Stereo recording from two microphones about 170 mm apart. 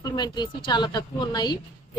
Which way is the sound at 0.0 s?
25° left (ahead or behind).